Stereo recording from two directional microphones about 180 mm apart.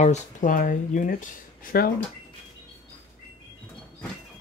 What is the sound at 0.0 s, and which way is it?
Speech, 40° left (ahead or behind).